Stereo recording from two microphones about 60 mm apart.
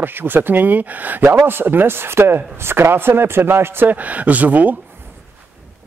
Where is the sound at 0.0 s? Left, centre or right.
Right.